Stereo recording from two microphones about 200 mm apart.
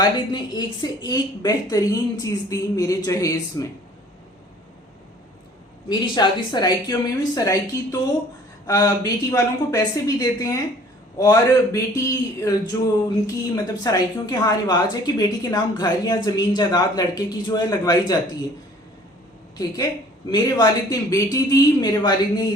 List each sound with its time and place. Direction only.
0.0 s a woman's voice: 20° left (ahead or behind)
5.9 s a woman's voice: 20° left (ahead or behind)
19.5 s a woman's voice: 20° left (ahead or behind)